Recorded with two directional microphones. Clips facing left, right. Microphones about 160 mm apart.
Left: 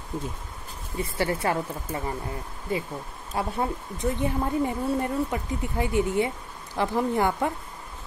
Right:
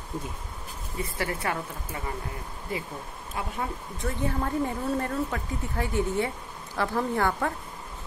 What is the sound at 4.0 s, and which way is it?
Speech, 20° left (ahead or behind).